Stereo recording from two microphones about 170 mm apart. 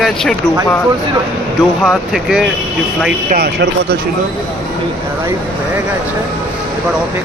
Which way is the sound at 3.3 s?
75° right (ahead or behind).